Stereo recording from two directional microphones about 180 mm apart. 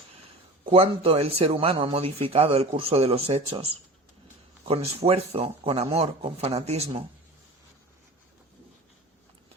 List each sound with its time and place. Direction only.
0.6 s speech: 30° right (ahead or behind)
4.7 s speech: 35° right (ahead or behind)